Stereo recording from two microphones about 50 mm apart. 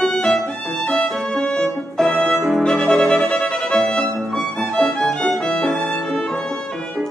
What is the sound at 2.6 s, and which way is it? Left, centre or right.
Music, centre.